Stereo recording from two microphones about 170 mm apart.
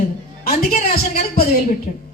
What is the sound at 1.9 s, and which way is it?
Speech, 50° left (ahead or behind).